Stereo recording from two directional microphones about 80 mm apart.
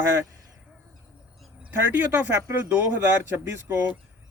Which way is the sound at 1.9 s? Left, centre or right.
Right.